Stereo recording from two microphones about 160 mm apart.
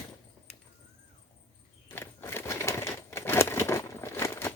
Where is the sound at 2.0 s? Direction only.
15° left (ahead or behind).